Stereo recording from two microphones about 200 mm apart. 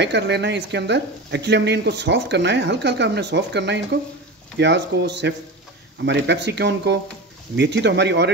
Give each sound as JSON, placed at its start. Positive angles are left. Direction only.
{"t": 0.0, "sound": "speech", "side_deg": -60}